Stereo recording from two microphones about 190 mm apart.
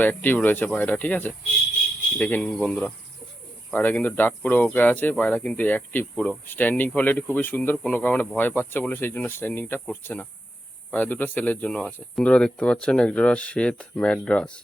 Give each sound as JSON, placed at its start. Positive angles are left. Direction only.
{"t": 0.0, "sound": "speech", "side_deg": 10}